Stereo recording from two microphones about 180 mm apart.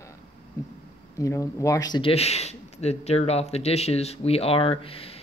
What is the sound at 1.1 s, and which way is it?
Speech, 15° left (ahead or behind).